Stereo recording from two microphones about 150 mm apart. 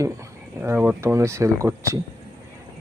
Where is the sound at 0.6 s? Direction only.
10° right (ahead or behind).